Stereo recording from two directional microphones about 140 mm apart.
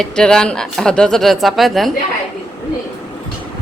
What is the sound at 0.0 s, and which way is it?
Speech, 5° left (ahead or behind).